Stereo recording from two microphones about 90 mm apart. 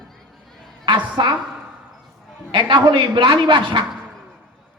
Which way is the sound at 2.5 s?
55° right (ahead or behind).